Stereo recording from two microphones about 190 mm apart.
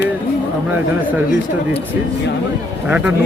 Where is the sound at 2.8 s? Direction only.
10° right (ahead or behind).